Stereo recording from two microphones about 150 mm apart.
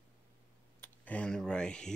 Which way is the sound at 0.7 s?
10° left (ahead or behind).